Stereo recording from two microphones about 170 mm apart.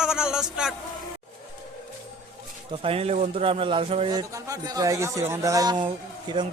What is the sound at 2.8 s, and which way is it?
A man's voice, 35° right (ahead or behind).